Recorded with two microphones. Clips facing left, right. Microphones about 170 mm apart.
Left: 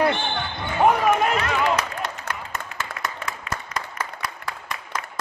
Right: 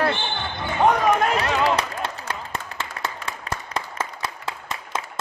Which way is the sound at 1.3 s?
35° right (ahead or behind).